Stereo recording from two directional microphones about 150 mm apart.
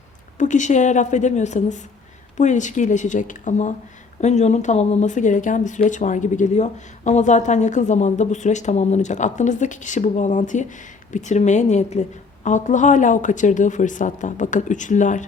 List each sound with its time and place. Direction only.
0.3 s speech: 55° left (ahead or behind)